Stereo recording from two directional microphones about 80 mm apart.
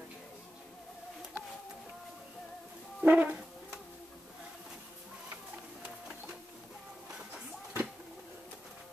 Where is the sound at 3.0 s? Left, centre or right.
Centre.